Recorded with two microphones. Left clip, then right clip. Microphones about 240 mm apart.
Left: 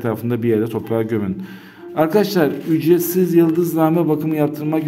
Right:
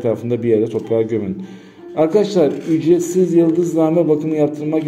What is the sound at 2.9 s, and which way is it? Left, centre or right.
Speech, left.